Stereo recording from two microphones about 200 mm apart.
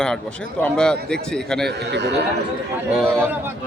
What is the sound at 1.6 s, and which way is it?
Speech, 60° right (ahead or behind).